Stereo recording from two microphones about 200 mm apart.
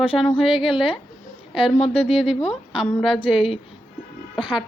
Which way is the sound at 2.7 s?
Centre (ahead or behind).